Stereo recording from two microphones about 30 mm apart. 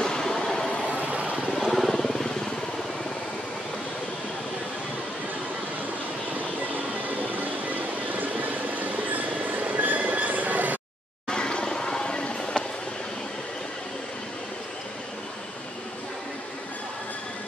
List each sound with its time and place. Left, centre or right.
0.0 s vehicle: centre
1.0 s vehicle: right
1.7 s vehicle: centre
2.0 s vehicle: centre
7.3 s vehicle: right
9.7 s train: right
11.2 s a sound: left